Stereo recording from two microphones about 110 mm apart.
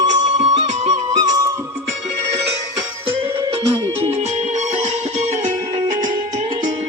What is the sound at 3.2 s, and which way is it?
Music, 60° right (ahead or behind).